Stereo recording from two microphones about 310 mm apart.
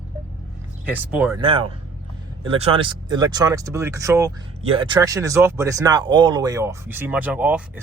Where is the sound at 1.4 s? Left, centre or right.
Centre.